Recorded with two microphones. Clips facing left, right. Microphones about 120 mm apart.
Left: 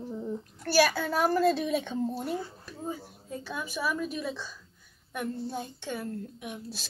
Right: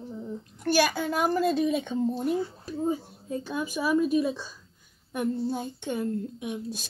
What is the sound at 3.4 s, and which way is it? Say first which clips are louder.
A child's voice: right 4 dB; 15° right (ahead or behind).